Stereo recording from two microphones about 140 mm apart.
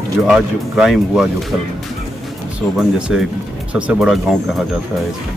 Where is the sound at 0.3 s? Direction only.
Centre (ahead or behind).